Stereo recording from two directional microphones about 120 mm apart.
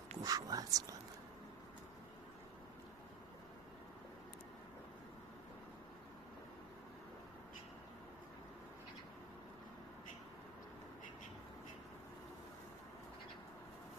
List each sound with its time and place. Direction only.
0.2 s speech: 30° right (ahead or behind)